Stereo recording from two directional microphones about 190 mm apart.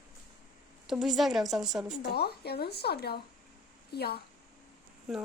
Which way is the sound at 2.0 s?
55° left (ahead or behind).